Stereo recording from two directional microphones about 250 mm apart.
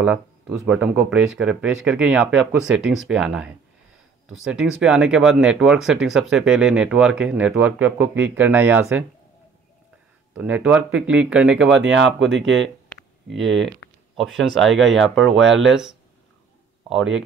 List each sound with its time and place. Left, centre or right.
0.0 s speech: centre
10.3 s speech: centre
11.7 s speech: right
12.6 s a sound: centre
13.7 s speech: centre
15.4 s speech: right
15.7 s speech: centre